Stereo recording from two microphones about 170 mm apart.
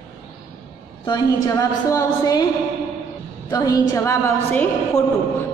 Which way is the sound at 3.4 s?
20° left (ahead or behind).